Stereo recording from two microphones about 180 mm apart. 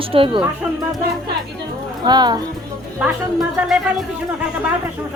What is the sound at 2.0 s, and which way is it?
Speech, 25° right (ahead or behind).